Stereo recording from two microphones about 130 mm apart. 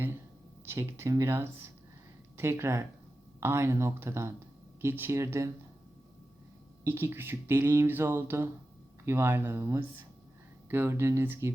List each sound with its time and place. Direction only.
0.6 s speech: 20° right (ahead or behind)
6.8 s speech: 15° right (ahead or behind)